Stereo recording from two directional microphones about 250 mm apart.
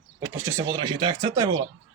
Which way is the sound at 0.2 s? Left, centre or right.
Centre.